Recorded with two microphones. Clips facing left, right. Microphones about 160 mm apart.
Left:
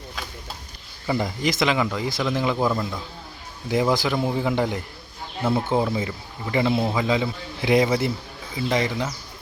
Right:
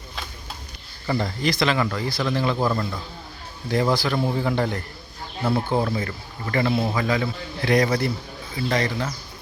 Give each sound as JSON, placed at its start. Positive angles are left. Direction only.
{"t": 1.0, "sound": "speech", "side_deg": 15}
{"t": 5.4, "sound": "speech", "side_deg": 0}
{"t": 5.6, "sound": "a man's voice", "side_deg": 15}